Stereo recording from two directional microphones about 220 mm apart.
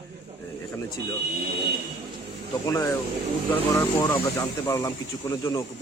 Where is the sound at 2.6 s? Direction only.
15° left (ahead or behind).